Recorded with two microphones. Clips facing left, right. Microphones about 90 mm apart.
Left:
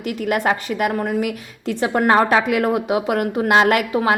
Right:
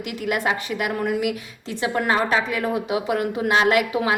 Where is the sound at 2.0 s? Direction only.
55° left (ahead or behind).